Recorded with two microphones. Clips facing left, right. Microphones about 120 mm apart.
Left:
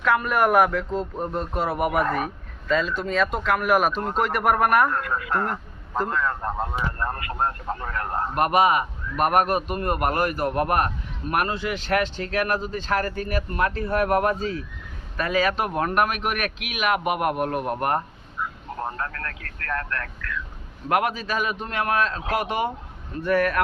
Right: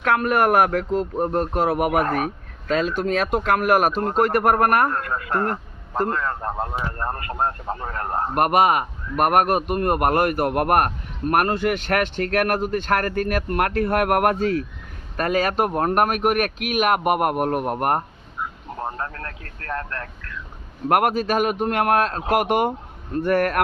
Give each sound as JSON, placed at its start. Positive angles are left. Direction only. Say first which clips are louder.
{"t": 0.0, "sound": "speech", "louder": "right 2 dB", "side_deg": -55}
{"t": 3.3, "sound": "speech", "louder": "right 5 dB", "side_deg": -55}
{"t": 4.9, "sound": "speech", "louder": "right 1 dB", "side_deg": -35}
{"t": 7.3, "sound": "speech", "louder": "right 2 dB", "side_deg": -25}
{"t": 8.4, "sound": "speech", "louder": "right 2 dB", "side_deg": -50}
{"t": 15.1, "sound": "speech", "louder": "right 2 dB", "side_deg": -50}
{"t": 18.8, "sound": "speech", "louder": "right 1 dB", "side_deg": -20}
{"t": 20.8, "sound": "speech", "louder": "right 5 dB", "side_deg": -50}